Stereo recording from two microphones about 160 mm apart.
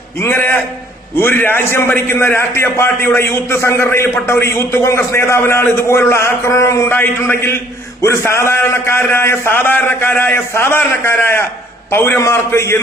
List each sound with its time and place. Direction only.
0.2 s a man's voice: 15° left (ahead or behind)